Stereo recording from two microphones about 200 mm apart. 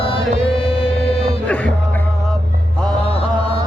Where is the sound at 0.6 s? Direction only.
25° left (ahead or behind).